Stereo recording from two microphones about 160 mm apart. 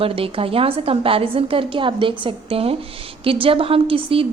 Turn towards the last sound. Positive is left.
turn(degrees=-35)  # may be behind; listen again after turning